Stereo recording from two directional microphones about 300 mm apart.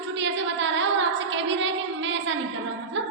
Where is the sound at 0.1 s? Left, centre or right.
Right.